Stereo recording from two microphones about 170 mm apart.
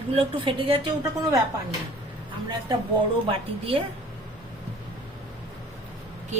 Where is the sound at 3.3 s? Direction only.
35° right (ahead or behind).